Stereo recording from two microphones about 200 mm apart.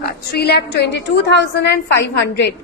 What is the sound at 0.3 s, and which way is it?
A woman's voice, 55° left (ahead or behind).